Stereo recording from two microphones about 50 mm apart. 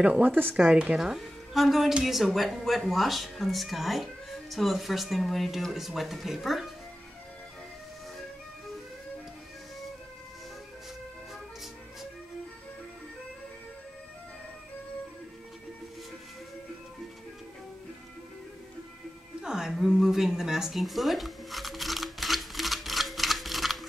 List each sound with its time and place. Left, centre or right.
0.0 s a woman's voice: right
0.6 s speech: centre
19.4 s a sound: centre